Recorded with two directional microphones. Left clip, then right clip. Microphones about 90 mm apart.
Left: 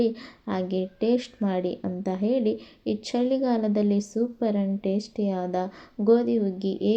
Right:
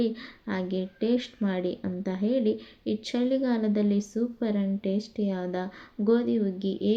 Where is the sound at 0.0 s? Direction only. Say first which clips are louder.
Left 4 dB; 30° left (ahead or behind).